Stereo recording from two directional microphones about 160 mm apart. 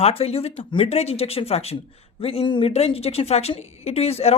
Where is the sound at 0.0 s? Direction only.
40° left (ahead or behind).